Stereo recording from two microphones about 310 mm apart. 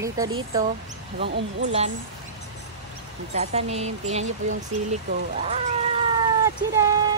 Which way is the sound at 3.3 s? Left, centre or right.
Right.